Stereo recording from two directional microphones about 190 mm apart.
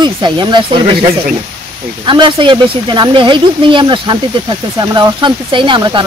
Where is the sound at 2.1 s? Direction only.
25° right (ahead or behind).